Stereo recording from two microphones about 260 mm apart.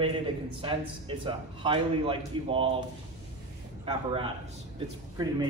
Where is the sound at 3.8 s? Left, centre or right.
Centre.